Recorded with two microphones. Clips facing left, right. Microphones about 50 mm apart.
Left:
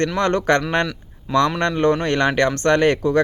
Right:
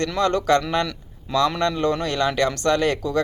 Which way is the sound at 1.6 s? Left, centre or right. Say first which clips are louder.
Left 3 dB; left.